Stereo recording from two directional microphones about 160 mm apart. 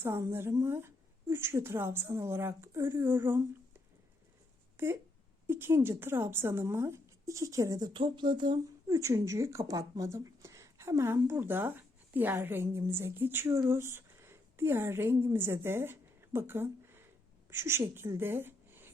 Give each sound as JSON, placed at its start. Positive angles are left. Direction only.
{"t": 0.0, "sound": "a woman's voice", "side_deg": -15}
{"t": 4.8, "sound": "a woman's voice", "side_deg": -15}
{"t": 7.9, "sound": "a woman's voice", "side_deg": -30}